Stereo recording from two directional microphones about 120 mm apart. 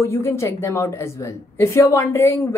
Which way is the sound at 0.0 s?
25° left (ahead or behind).